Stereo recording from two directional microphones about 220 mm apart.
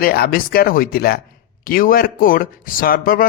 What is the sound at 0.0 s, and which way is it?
Speech, 40° left (ahead or behind).